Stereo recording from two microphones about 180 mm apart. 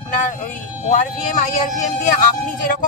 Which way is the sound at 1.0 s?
45° left (ahead or behind).